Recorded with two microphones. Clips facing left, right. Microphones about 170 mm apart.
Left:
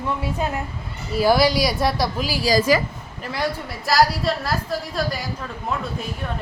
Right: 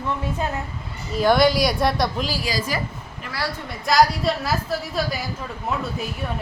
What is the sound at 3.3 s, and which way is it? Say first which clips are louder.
Speech: left 4 dB; 20° left (ahead or behind).